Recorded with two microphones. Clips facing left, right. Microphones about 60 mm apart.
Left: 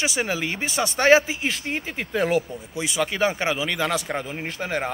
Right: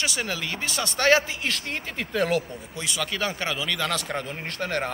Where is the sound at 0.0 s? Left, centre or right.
Centre.